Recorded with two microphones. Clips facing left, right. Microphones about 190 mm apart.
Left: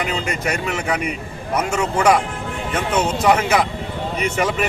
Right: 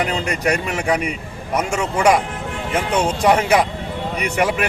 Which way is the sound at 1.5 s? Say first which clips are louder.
Even; 10° right (ahead or behind).